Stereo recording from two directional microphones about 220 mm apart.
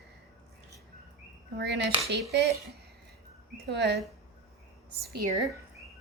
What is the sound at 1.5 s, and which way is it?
Speech, 50° right (ahead or behind).